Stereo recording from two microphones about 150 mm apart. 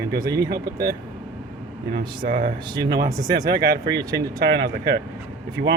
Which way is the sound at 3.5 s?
90° right.